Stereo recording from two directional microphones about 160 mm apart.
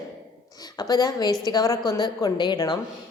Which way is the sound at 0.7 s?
25° left (ahead or behind).